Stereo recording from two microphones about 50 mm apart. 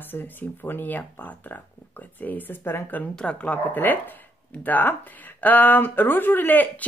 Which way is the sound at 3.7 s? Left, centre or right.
Left.